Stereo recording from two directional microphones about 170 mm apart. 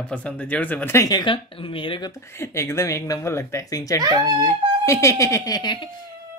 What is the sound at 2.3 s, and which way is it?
Speech, 15° left (ahead or behind).